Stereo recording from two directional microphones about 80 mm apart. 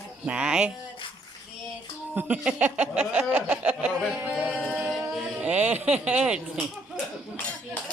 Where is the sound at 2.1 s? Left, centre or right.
Centre.